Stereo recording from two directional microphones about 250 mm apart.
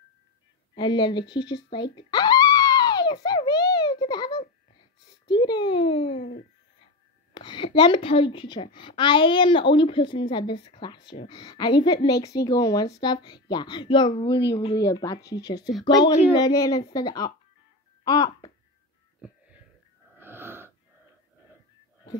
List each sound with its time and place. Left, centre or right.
0.7 s music: centre
5.0 s a child's voice: centre
7.3 s a woman's voice: centre
20.2 s wheeze: centre